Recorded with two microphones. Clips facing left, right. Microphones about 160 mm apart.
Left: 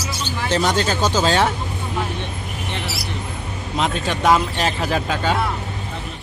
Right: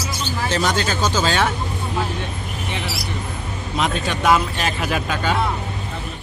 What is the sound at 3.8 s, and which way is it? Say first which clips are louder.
Speech: left 1 dB; 30° left (ahead or behind).